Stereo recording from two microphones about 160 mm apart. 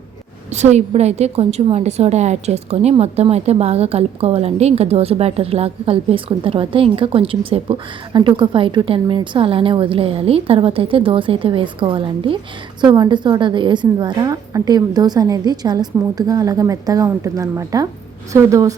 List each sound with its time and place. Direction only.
0.5 s a woman's voice: 45° right (ahead or behind); by 18.7 s 20° right (ahead or behind)